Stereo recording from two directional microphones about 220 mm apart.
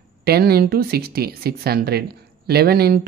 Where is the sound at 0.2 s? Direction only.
45° right (ahead or behind).